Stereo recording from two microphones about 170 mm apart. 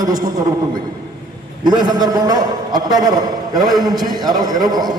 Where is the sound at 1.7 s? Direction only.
25° right (ahead or behind).